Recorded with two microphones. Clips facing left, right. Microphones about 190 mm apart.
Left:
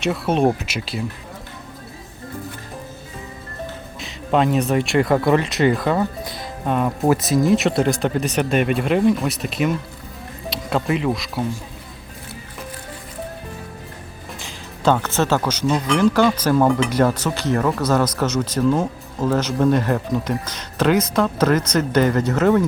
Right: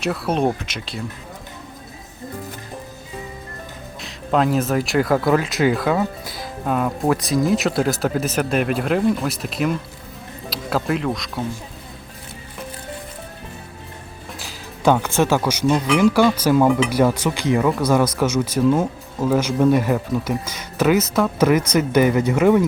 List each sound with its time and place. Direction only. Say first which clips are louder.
0.0 s speech: left 2 dB; centre (ahead or behind)
4.0 s speech: left 1 dB; centre (ahead or behind)
14.3 s speech: even; 5° right (ahead or behind)